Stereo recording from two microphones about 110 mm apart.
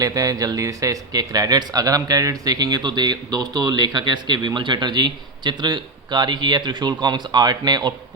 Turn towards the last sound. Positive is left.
turn(degrees=-40)  # may be behind; listen again after turning